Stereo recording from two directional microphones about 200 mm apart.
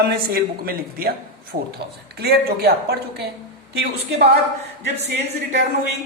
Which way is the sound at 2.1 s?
55° right (ahead or behind).